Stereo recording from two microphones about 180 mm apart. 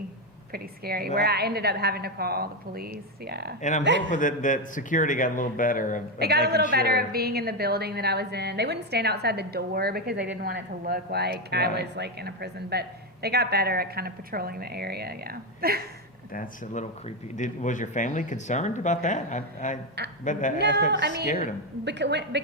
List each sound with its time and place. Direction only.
0.5 s a woman's voice: 55° right (ahead or behind)
3.6 s speech: 45° left (ahead or behind)
6.1 s a woman's voice: 65° right (ahead or behind)
16.3 s speech: 50° left (ahead or behind)
20.6 s a woman's voice: 70° right (ahead or behind)
21.2 s speech: 45° left (ahead or behind)
21.8 s a woman's voice: 70° right (ahead or behind)